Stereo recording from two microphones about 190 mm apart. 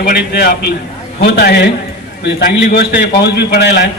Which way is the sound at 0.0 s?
55° left (ahead or behind).